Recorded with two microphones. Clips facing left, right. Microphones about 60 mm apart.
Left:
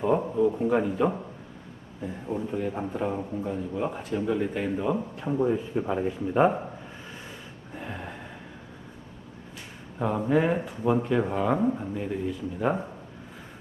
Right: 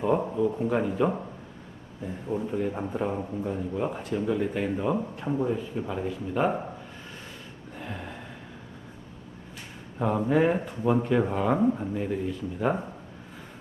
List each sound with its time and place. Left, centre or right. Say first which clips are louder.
0.0 s a man's voice: left 1 dB; centre
2.2 s speech: right 1 dB; centre
2.6 s a man's voice: even; centre
5.7 s speech: left 4 dB; centre
7.8 s gasp: left 1 dB; centre
10.0 s a man's voice: right 1 dB; centre